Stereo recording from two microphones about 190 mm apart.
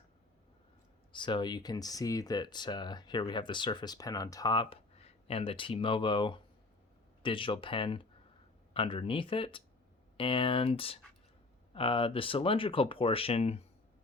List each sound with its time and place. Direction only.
1.1 s speech: 25° left (ahead or behind)